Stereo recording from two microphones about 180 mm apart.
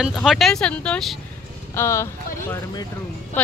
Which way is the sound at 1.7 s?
15° left (ahead or behind).